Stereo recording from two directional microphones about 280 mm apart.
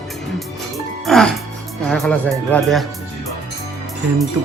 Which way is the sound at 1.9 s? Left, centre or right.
Centre.